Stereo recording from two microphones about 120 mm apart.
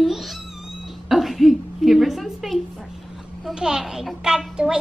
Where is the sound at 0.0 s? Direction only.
Centre (ahead or behind).